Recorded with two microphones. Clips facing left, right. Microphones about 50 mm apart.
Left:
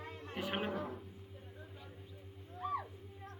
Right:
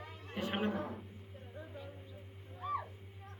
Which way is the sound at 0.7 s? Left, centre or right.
Right.